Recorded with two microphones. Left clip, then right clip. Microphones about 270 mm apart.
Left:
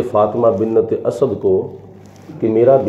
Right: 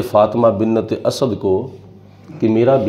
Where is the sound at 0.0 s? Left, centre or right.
Right.